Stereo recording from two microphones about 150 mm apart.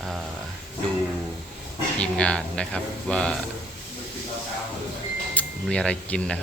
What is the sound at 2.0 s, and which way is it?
Speech, 5° left (ahead or behind).